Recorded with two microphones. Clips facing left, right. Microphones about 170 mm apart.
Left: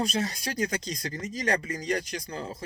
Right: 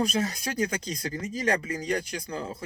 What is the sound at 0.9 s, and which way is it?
Speech, 30° right (ahead or behind).